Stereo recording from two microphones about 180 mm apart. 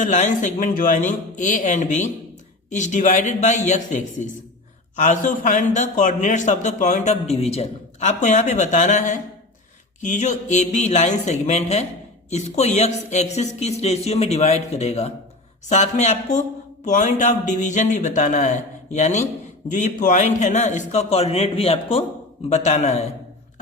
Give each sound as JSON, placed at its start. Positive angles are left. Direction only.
{"t": 0.0, "sound": "a man's voice", "side_deg": 40}
{"t": 10.2, "sound": "speech", "side_deg": 40}